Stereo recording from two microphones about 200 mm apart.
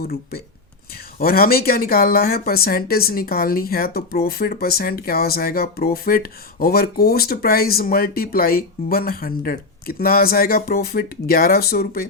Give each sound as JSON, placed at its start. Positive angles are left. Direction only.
{"t": 0.0, "sound": "speech", "side_deg": 50}